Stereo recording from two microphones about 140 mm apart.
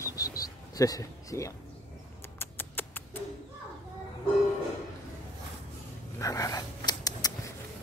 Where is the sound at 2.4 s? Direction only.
15° left (ahead or behind).